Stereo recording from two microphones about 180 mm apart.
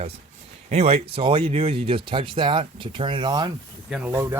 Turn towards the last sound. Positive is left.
turn(degrees=-15)  # may be behind; listen again after turning